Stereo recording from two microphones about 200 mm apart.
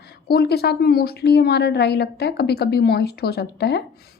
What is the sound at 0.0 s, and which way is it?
A woman's voice, 50° left (ahead or behind).